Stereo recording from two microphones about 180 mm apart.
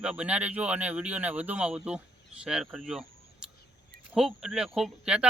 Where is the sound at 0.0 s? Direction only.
5° right (ahead or behind).